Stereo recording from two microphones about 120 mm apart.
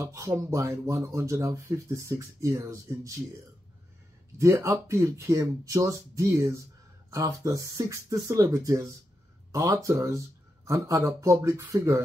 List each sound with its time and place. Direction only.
0.0 s speech: 25° right (ahead or behind)
4.4 s speech: 25° right (ahead or behind)